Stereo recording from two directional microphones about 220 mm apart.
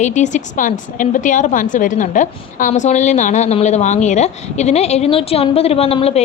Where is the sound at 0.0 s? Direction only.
35° left (ahead or behind).